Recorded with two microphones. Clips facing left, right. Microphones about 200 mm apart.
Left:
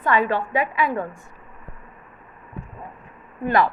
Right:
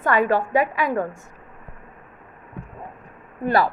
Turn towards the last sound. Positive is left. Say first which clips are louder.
# even
turn(degrees=-35)  # may be behind; listen again after turning